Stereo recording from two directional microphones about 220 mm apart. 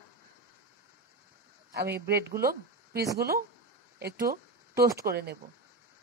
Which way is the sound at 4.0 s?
45° right (ahead or behind).